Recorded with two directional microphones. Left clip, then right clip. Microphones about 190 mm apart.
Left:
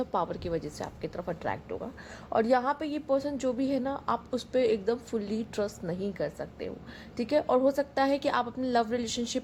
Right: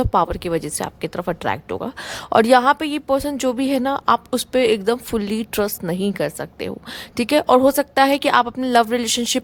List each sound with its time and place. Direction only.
0.0 s a woman's voice: 40° right (ahead or behind)